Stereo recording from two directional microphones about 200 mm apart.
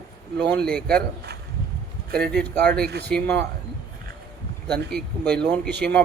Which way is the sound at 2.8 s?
55° right (ahead or behind).